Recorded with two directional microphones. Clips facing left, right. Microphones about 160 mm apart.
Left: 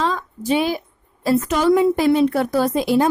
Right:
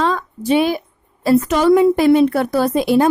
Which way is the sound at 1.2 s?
65° right (ahead or behind).